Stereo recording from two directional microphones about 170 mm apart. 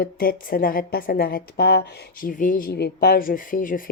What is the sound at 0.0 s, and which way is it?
A woman's voice, 60° left (ahead or behind).